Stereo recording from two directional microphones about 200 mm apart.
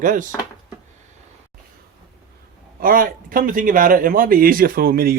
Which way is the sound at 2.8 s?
45° right (ahead or behind).